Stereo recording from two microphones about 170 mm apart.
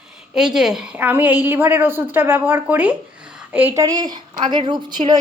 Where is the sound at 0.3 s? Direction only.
5° right (ahead or behind).